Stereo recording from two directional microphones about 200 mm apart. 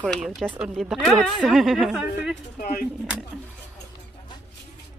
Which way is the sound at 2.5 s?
50° left (ahead or behind).